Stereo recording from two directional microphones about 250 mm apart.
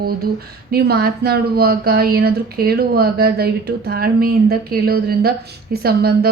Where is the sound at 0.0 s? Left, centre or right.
Right.